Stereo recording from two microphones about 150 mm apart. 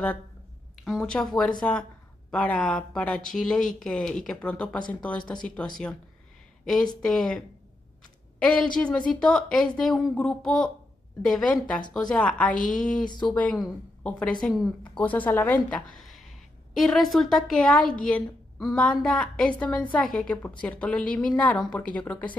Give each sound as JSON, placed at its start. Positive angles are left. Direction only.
{"t": 0.8, "sound": "a woman's voice", "side_deg": 5}
{"t": 6.6, "sound": "a woman's voice", "side_deg": 5}
{"t": 13.0, "sound": "speech", "side_deg": 30}
{"t": 13.3, "sound": "a woman's voice", "side_deg": 10}
{"t": 14.8, "sound": "a woman's voice", "side_deg": 10}